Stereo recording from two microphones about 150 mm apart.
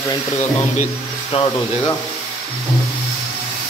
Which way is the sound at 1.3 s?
35° left (ahead or behind).